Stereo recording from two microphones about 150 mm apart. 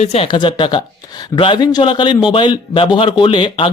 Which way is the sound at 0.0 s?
45° left (ahead or behind).